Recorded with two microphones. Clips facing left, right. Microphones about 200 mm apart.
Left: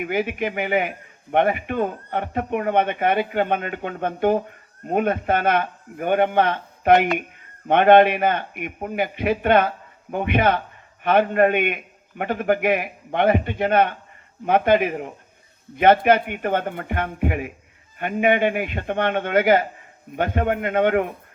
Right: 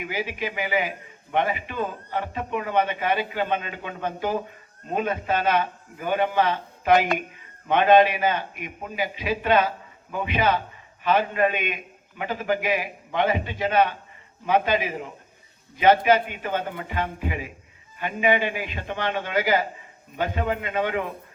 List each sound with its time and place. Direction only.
0.0 s a man's voice: 55° left (ahead or behind)